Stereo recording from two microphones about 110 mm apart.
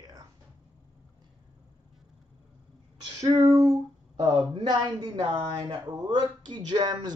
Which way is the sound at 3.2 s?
30° right (ahead or behind).